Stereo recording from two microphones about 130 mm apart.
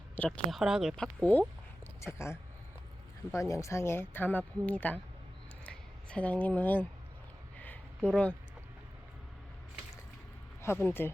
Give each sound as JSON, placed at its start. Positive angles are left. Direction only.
{"t": 0.2, "sound": "speech", "side_deg": 5}
{"t": 7.6, "sound": "a sound", "side_deg": 10}
{"t": 10.6, "sound": "speech", "side_deg": 15}